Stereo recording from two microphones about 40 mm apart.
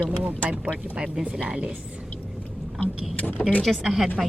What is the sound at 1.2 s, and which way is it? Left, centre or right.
Speech, right.